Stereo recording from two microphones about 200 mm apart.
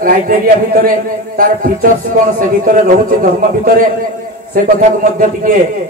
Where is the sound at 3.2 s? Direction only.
45° right (ahead or behind).